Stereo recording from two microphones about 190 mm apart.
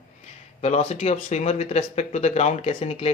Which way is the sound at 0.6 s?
35° left (ahead or behind).